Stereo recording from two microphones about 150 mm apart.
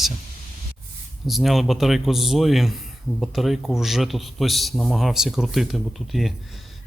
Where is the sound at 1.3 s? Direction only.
Centre (ahead or behind).